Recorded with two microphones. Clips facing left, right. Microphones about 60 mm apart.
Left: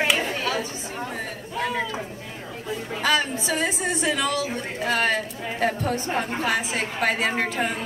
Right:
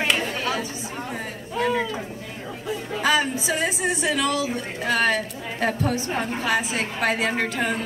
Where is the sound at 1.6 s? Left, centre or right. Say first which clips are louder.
Right 4 dB; centre.